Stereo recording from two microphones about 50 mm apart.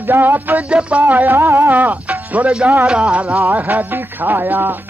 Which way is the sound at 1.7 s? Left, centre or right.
Right.